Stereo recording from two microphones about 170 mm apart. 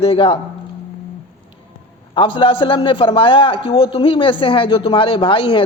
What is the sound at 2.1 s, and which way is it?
A man's voice, 30° left (ahead or behind).